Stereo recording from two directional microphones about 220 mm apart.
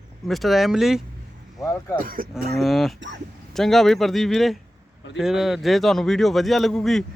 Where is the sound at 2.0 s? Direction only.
40° right (ahead or behind).